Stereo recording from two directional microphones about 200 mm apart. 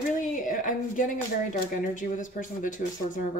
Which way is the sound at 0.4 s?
40° left (ahead or behind).